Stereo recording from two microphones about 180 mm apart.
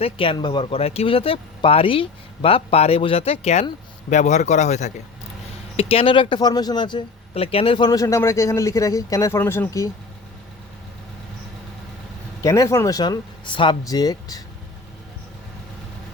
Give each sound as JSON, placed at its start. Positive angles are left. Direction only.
{"t": 0.0, "sound": "speech", "side_deg": 30}
{"t": 12.4, "sound": "speech", "side_deg": 15}